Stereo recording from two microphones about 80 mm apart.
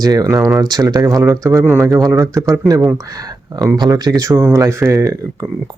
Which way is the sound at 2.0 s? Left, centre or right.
Right.